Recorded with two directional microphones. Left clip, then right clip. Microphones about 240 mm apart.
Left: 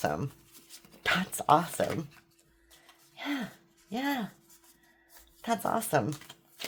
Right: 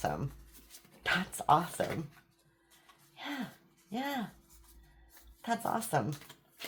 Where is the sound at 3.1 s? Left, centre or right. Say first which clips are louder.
Left 5 dB; left.